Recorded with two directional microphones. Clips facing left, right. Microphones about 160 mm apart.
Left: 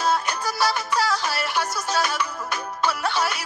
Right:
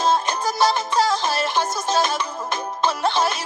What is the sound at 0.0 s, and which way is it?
Music, 25° right (ahead or behind).